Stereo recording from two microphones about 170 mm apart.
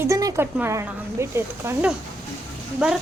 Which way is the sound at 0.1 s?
20° right (ahead or behind).